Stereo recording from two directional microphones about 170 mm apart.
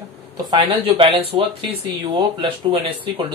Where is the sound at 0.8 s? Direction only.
35° right (ahead or behind).